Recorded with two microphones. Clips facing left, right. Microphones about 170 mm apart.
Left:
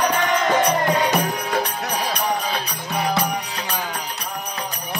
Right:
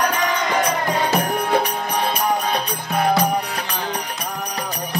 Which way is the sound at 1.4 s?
55° right (ahead or behind).